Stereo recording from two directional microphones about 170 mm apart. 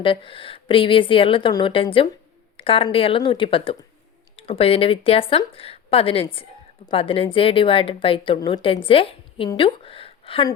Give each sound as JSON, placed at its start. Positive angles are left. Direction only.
{"t": 0.0, "sound": "a woman's voice", "side_deg": 30}